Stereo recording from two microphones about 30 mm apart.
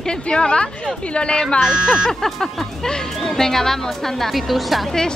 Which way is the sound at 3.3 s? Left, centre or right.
Centre.